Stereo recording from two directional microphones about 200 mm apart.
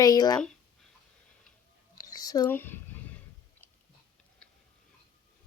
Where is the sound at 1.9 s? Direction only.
20° left (ahead or behind).